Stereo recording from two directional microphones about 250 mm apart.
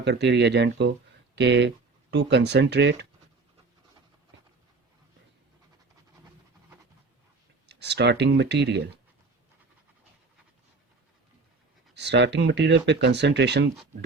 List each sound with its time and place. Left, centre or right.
0.0 s speech: right
7.7 s speech: right
11.9 s speech: right